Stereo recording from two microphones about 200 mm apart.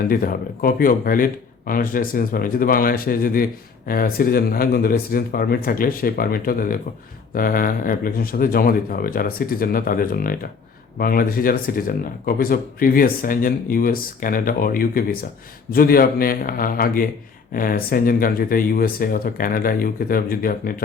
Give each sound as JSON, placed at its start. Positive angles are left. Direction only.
{"t": 0.1, "sound": "speech", "side_deg": 45}